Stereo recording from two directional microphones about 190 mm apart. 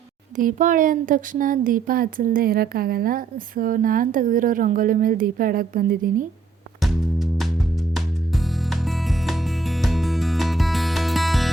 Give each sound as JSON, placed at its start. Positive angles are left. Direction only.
{"t": 0.3, "sound": "speech", "side_deg": -45}
{"t": 6.7, "sound": "music", "side_deg": 0}